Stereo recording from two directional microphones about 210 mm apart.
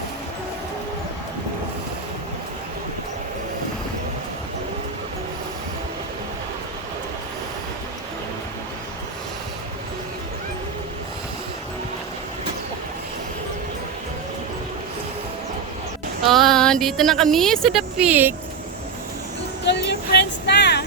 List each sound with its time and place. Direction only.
16.2 s speech: centre (ahead or behind)
19.6 s vehicle: 55° left (ahead or behind)